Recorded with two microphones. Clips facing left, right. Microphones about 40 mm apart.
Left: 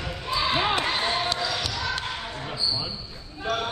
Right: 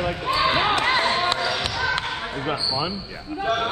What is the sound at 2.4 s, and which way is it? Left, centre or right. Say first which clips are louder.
Speech: right 5 dB; right.